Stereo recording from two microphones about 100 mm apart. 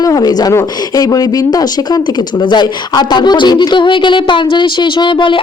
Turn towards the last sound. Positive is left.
turn(degrees=50)  # may be behind; listen again after turning